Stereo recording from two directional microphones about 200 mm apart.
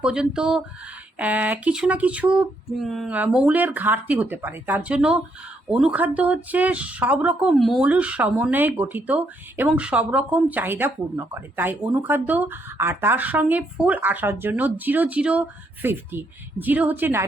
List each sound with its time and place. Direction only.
0.0 s speech: 5° right (ahead or behind)